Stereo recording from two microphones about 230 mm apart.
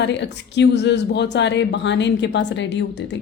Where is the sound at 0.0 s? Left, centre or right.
Left.